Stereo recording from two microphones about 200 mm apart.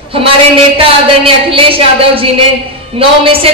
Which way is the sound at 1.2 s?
25° right (ahead or behind).